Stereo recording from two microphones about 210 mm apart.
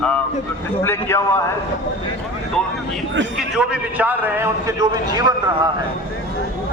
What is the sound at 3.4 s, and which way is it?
A man's voice, 5° right (ahead or behind).